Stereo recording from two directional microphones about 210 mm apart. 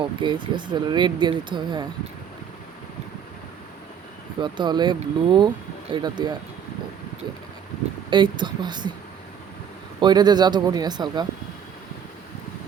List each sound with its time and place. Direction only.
0.0 s speech: 25° right (ahead or behind)
4.4 s speech: 20° right (ahead or behind)
8.1 s speech: 20° right (ahead or behind)
10.0 s speech: 20° right (ahead or behind)